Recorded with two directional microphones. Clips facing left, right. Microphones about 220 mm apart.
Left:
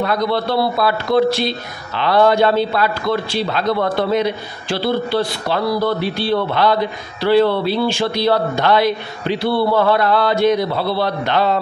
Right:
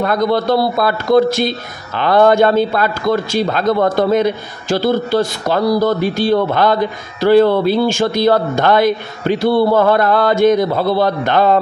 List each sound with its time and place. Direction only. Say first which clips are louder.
0.0 s a man's voice: right 3 dB; 50° right (ahead or behind)